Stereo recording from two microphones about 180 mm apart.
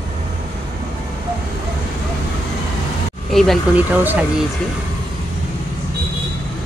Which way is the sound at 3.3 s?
Centre (ahead or behind).